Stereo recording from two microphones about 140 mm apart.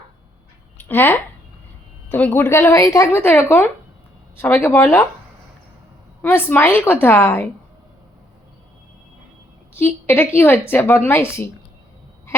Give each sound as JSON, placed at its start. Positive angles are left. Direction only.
{"t": 0.8, "sound": "a woman's voice", "side_deg": 15}
{"t": 6.2, "sound": "a woman's voice", "side_deg": 15}
{"t": 9.7, "sound": "a woman's voice", "side_deg": 15}